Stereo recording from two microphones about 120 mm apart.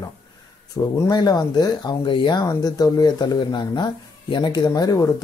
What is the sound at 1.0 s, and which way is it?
Speech, 35° left (ahead or behind).